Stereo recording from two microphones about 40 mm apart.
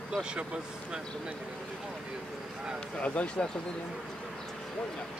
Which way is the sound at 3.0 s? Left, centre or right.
Left.